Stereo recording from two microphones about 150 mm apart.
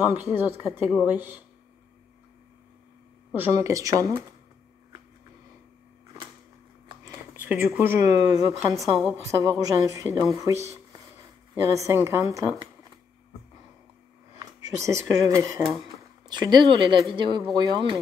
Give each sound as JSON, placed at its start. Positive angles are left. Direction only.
{"t": 0.3, "sound": "a woman's voice", "side_deg": -15}
{"t": 0.6, "sound": "a woman's voice", "side_deg": -5}
{"t": 1.0, "sound": "a woman's voice", "side_deg": -10}
{"t": 3.3, "sound": "a woman's voice", "side_deg": -15}
{"t": 7.1, "sound": "speech", "side_deg": -10}
{"t": 8.7, "sound": "a woman's voice", "side_deg": 0}
{"t": 9.0, "sound": "a woman's voice", "side_deg": -20}
{"t": 11.6, "sound": "a woman's voice", "side_deg": -20}
{"t": 14.4, "sound": "speech", "side_deg": -20}